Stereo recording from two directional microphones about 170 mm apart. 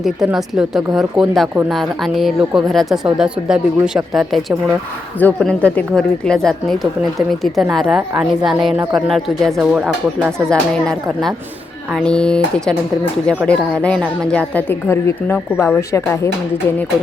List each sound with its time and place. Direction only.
0.0 s a woman's voice: centre (ahead or behind)